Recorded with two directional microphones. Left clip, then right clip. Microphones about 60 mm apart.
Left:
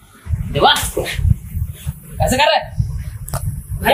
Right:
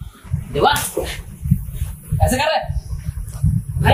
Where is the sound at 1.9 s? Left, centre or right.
Left.